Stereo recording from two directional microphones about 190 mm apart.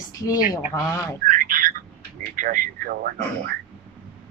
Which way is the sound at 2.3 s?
45° right (ahead or behind).